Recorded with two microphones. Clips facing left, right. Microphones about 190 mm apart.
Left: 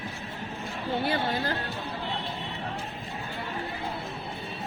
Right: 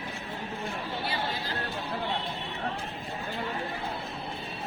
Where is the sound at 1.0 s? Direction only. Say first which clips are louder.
Left 7 dB; 55° left (ahead or behind).